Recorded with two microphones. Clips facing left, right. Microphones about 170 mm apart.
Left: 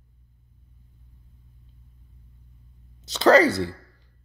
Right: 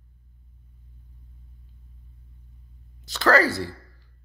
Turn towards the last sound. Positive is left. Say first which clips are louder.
# left 4 dB
turn(degrees=20)  # may be behind; listen again after turning